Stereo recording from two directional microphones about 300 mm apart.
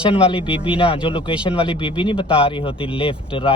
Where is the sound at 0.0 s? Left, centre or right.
Centre.